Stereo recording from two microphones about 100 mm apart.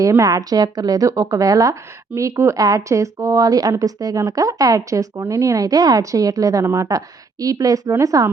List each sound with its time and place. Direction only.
0.0 s speech: 35° right (ahead or behind)